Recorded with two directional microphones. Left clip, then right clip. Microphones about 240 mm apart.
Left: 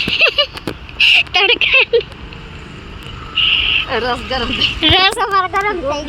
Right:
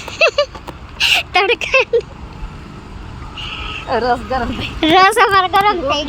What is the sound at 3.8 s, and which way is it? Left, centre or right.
A woman's voice, right.